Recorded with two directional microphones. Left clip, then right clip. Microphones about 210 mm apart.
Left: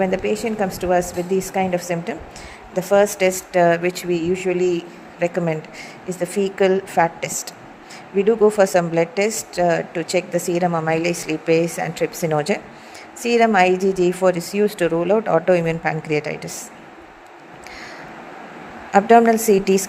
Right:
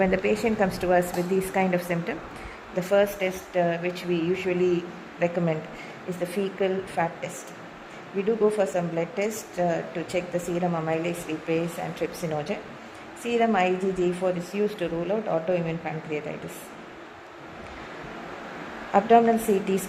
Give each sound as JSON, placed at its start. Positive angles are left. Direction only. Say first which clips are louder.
{"t": 0.0, "sound": "a woman's voice", "louder": "left 3 dB", "side_deg": 10}
{"t": 18.9, "sound": "a woman's voice", "louder": "left 6 dB", "side_deg": 20}